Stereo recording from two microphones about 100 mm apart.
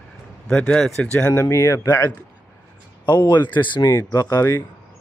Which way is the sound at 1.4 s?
30° left (ahead or behind).